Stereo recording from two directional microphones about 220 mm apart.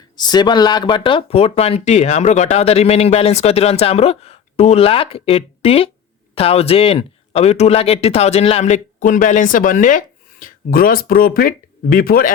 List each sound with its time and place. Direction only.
0.2 s speech: 20° left (ahead or behind); by 12.3 s 40° left (ahead or behind)